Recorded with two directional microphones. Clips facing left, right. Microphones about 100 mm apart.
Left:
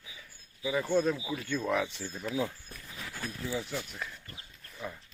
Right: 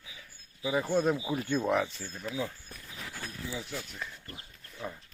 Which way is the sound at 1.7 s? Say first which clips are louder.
Right 2 dB; 5° right (ahead or behind).